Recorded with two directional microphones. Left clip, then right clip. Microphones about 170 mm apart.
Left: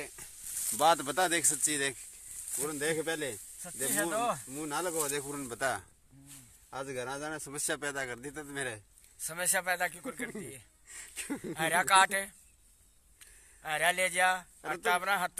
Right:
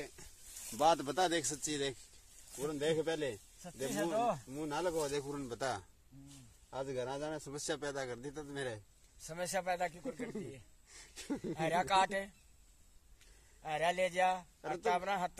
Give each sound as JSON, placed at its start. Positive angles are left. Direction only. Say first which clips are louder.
{"t": 0.2, "sound": "a sound", "louder": "left 6 dB", "side_deg": 10}
{"t": 0.7, "sound": "a man's voice", "louder": "left 4 dB", "side_deg": 20}
{"t": 3.9, "sound": "speech", "louder": "left 3 dB", "side_deg": -15}
{"t": 4.5, "sound": "a man's voice", "louder": "left 2 dB", "side_deg": 15}
{"t": 9.2, "sound": "speech", "louder": "left 5 dB", "side_deg": -10}
{"t": 10.9, "sound": "a sound", "louder": "left 3 dB", "side_deg": 20}
{"t": 11.5, "sound": "speech", "louder": "left 6 dB", "side_deg": -10}
{"t": 13.6, "sound": "speech", "louder": "left 4 dB", "side_deg": -10}